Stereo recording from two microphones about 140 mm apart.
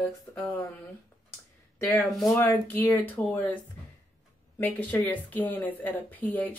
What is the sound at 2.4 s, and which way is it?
Speech, 15° left (ahead or behind).